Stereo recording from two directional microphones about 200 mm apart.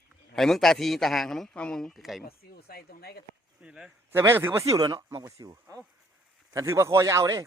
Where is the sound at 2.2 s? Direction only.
50° left (ahead or behind).